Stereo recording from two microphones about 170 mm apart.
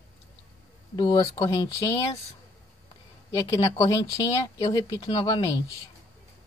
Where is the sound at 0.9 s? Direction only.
20° left (ahead or behind).